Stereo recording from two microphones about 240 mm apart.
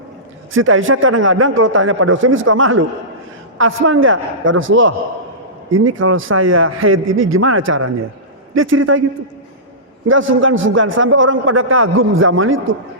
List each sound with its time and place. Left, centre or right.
0.5 s a man's voice: right
10.1 s a man's voice: right